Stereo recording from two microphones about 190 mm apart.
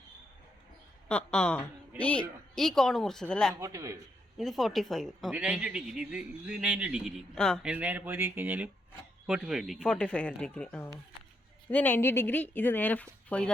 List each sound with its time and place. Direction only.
1.0 s speech: 5° left (ahead or behind)
3.5 s speech: 15° right (ahead or behind)
4.4 s speech: centre (ahead or behind)
7.7 s speech: 5° right (ahead or behind)